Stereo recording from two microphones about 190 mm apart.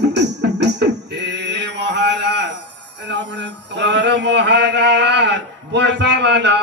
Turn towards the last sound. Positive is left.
turn(degrees=-65)  # may be behind; listen again after turning